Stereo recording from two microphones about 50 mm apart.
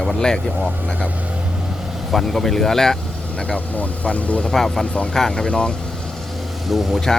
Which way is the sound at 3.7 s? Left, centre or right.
Left.